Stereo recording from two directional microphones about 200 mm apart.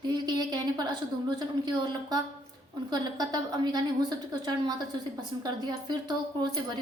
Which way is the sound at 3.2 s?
20° right (ahead or behind).